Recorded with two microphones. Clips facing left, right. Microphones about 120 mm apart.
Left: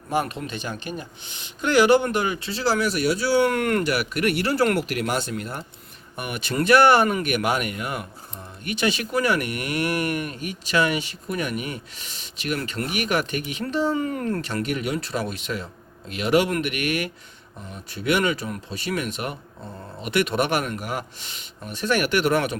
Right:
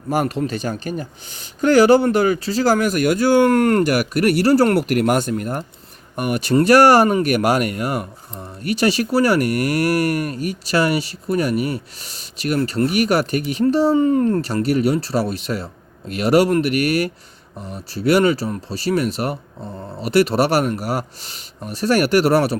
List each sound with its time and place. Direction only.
0.1 s speech: 40° right (ahead or behind)